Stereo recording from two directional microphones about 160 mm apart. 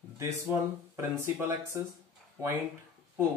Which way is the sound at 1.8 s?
20° right (ahead or behind).